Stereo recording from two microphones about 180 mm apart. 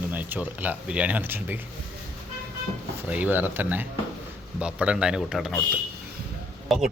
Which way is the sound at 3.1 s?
10° right (ahead or behind).